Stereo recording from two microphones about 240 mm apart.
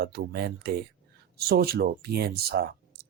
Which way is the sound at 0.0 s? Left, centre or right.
Right.